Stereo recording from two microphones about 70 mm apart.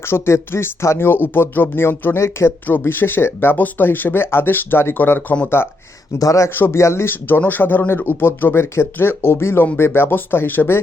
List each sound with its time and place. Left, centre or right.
0.0 s speech: left
2.6 s speech: left
6.1 s speech: left
6.5 s speech: left